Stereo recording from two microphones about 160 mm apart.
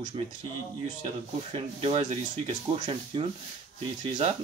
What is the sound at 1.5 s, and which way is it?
Speech, 40° right (ahead or behind).